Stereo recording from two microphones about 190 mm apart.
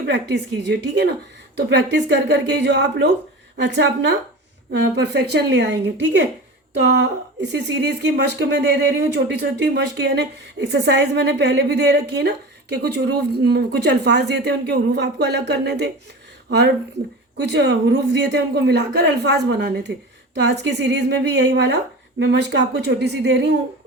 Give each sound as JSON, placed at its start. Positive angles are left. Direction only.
{"t": 0.0, "sound": "a woman's voice", "side_deg": -65}